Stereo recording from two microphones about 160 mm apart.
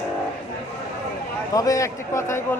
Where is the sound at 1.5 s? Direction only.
20° left (ahead or behind).